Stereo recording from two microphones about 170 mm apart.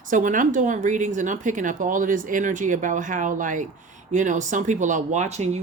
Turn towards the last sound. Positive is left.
turn(degrees=-40)  # may be behind; listen again after turning